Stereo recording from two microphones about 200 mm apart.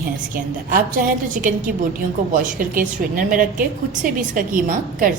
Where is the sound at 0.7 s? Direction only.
45° right (ahead or behind).